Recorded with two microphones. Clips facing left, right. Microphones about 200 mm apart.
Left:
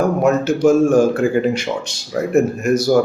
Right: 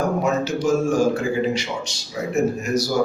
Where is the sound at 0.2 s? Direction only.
55° left (ahead or behind).